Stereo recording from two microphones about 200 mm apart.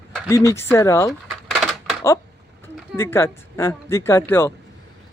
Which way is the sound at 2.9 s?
10° left (ahead or behind).